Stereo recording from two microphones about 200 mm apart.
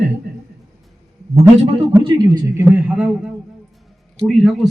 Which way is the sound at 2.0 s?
20° right (ahead or behind).